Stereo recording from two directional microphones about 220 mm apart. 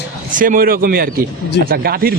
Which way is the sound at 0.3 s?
40° right (ahead or behind).